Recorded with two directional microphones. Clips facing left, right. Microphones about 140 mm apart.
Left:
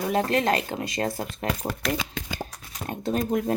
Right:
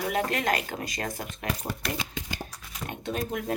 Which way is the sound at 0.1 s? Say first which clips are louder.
Left 5 dB; 30° left (ahead or behind).